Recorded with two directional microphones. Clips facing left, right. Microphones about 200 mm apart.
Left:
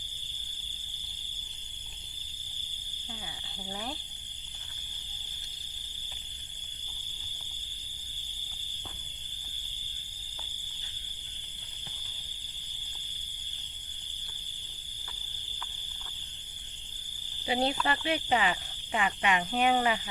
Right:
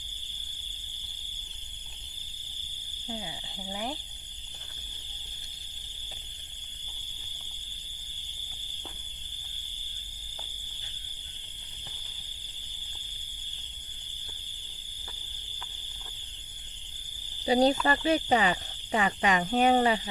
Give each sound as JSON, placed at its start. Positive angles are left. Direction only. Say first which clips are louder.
{"t": 3.7, "sound": "speech", "louder": "right 4 dB", "side_deg": -15}
{"t": 17.4, "sound": "speech", "louder": "right 6 dB", "side_deg": -40}